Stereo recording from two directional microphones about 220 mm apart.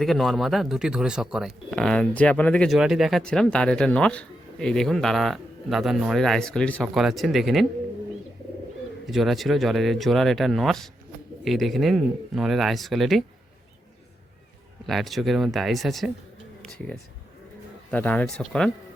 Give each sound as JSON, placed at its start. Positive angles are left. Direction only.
{"t": 0.0, "sound": "speech", "side_deg": 0}
{"t": 9.0, "sound": "speech", "side_deg": 0}
{"t": 14.8, "sound": "speech", "side_deg": 0}